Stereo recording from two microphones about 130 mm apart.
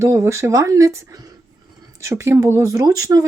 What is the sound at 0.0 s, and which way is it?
Speech, 20° right (ahead or behind).